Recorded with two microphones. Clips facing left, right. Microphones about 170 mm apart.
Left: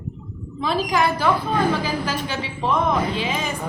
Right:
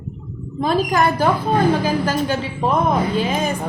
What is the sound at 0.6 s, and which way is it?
A woman's voice, 45° right (ahead or behind).